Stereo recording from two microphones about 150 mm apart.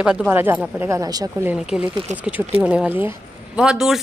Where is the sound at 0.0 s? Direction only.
5° right (ahead or behind).